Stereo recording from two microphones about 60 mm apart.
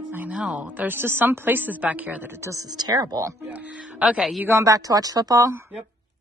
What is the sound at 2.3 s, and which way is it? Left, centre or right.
Speech, right.